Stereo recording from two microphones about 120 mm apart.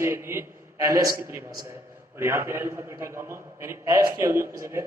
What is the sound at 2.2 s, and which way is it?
A man's voice, 20° right (ahead or behind).